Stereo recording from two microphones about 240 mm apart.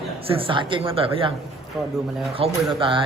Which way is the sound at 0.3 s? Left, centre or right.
Right.